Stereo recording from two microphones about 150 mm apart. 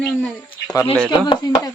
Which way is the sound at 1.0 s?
30° left (ahead or behind).